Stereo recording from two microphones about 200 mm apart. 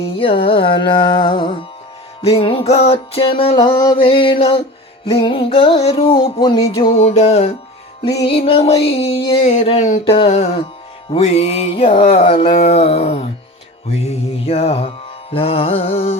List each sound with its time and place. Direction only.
0.0 s music: 30° left (ahead or behind)